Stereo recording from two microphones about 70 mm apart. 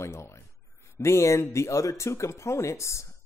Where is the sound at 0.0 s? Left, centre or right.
Left.